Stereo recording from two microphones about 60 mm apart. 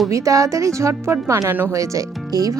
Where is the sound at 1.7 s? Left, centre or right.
Right.